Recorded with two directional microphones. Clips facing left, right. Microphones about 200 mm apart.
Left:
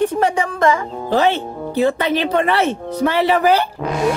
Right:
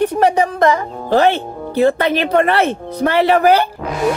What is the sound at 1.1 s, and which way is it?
Speech, 55° right (ahead or behind).